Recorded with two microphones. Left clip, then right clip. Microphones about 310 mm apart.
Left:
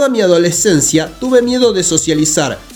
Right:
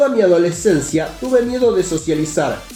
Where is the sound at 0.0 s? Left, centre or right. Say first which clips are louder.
Left 2 dB; left.